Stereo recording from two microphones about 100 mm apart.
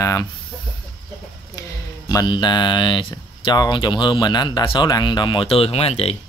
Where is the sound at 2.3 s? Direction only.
50° left (ahead or behind).